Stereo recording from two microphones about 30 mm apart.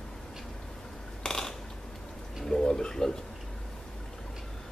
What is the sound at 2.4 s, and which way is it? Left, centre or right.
Pigeon, centre.